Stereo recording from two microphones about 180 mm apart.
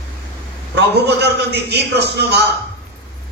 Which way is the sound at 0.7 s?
65° right (ahead or behind).